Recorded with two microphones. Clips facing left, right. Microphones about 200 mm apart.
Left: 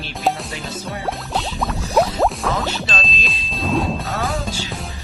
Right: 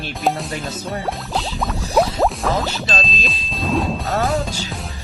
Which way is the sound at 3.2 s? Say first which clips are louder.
Right 1 dB; centre (ahead or behind).